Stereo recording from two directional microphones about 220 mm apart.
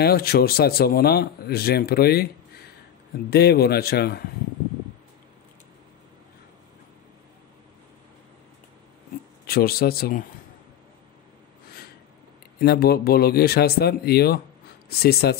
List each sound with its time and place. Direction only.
0.0 s speech: 45° left (ahead or behind)
9.5 s speech: 45° left (ahead or behind)
12.5 s speech: 45° left (ahead or behind)